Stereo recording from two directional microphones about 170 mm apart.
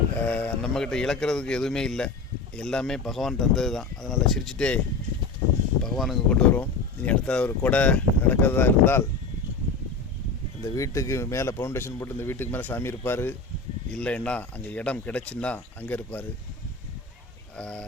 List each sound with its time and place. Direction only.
0.3 s speech: 5° left (ahead or behind)
5.8 s speech: centre (ahead or behind)
10.6 s speech: 20° left (ahead or behind)
17.6 s speech: 5° left (ahead or behind)